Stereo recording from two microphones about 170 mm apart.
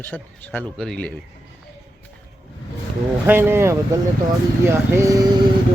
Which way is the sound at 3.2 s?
10° right (ahead or behind).